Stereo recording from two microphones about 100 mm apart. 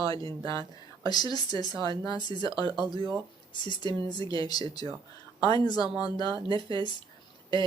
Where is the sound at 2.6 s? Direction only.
50° right (ahead or behind).